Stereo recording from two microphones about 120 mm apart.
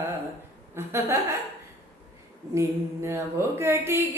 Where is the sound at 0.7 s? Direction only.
20° right (ahead or behind).